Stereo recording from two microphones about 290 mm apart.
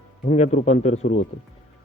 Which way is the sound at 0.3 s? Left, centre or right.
Left.